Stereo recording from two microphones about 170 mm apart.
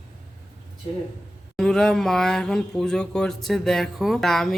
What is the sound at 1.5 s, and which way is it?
Speech, centre (ahead or behind).